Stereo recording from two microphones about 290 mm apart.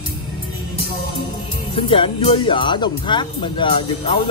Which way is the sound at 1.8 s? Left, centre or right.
Centre.